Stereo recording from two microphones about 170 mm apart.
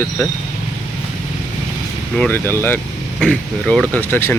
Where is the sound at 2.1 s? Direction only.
10° left (ahead or behind).